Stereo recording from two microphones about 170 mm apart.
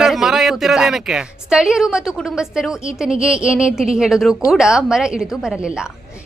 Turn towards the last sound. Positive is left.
turn(degrees=-5)  # may be behind; listen again after turning